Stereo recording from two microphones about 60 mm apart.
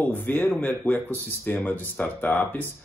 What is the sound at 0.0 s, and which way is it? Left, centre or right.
Speech, left.